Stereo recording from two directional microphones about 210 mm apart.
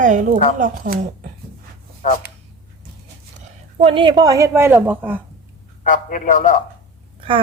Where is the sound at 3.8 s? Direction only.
25° right (ahead or behind); by 5.2 s 10° right (ahead or behind).